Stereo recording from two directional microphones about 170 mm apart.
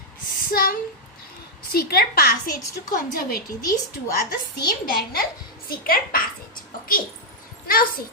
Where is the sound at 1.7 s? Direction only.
65° left (ahead or behind).